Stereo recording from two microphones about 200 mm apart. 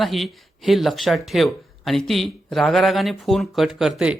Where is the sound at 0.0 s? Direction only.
Centre (ahead or behind).